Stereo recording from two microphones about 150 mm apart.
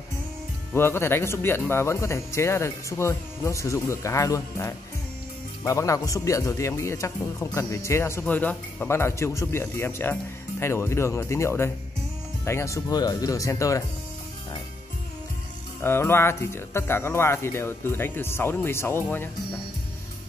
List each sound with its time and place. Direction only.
0.7 s speech: 15° left (ahead or behind)
15.8 s speech: 15° left (ahead or behind)